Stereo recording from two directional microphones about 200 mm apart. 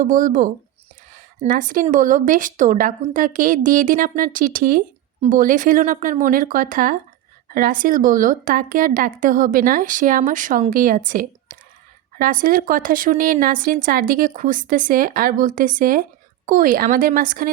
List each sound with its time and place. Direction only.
0.0 s a woman's voice: 40° right (ahead or behind)